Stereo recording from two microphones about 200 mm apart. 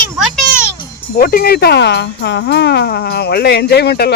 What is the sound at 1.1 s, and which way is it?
Speech, 50° left (ahead or behind).